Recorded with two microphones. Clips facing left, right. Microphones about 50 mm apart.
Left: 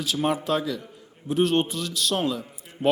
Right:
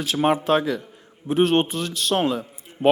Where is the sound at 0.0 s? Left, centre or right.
Right.